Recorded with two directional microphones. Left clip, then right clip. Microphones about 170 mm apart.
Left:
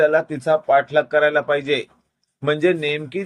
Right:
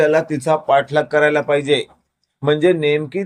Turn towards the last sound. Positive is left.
turn(degrees=-15)  # may be behind; listen again after turning